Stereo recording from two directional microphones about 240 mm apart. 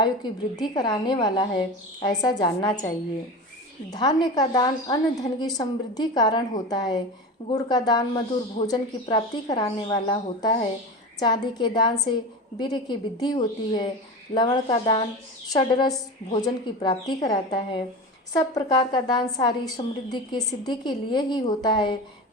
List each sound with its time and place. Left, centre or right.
0.0 s speech: centre
3.9 s a woman's voice: centre